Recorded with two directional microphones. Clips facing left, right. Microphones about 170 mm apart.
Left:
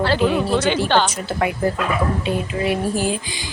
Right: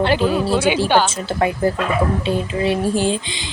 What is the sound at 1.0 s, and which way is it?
Speech, 30° right (ahead or behind).